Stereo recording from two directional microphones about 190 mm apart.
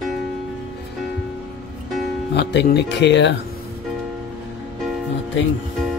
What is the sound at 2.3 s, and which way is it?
Speech, 65° left (ahead or behind).